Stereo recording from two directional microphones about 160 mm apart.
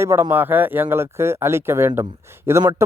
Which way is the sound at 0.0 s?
15° right (ahead or behind).